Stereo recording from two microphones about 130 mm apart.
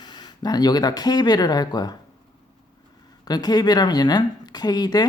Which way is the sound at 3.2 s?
30° left (ahead or behind).